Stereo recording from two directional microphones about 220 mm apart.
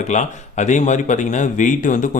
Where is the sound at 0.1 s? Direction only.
35° left (ahead or behind).